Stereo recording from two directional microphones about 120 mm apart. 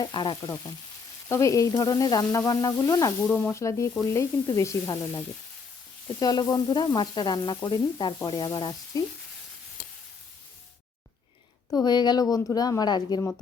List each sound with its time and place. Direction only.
0.0 s sizzle: 40° left (ahead or behind)
1.3 s sizzle: 25° left (ahead or behind)
3.2 s speech: 15° left (ahead or behind)
3.6 s sizzle: 25° left (ahead or behind)
11.8 s sizzle: 35° left (ahead or behind)